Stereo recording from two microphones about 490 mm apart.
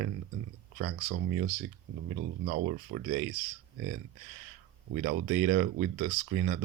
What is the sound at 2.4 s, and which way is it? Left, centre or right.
Speech, centre.